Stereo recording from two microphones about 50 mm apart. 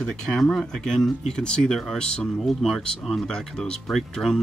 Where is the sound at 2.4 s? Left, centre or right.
Centre.